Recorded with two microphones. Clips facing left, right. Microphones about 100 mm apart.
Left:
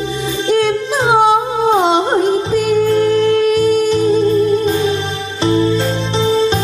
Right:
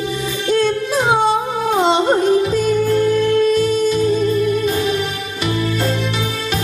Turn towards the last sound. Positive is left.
turn(degrees=25)  # may be behind; listen again after turning